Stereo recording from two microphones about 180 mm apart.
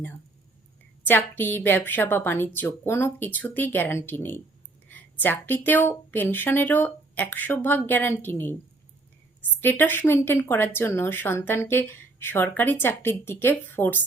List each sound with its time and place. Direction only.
1.0 s a woman's voice: 10° left (ahead or behind)